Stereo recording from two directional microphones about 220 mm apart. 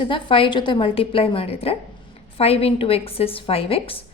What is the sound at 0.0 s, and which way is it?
A woman's voice, 20° left (ahead or behind).